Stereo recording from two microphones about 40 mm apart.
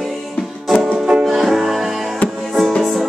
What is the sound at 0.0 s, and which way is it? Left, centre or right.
Music, centre.